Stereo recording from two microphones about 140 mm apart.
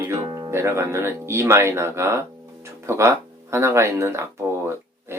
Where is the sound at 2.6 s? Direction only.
20° right (ahead or behind).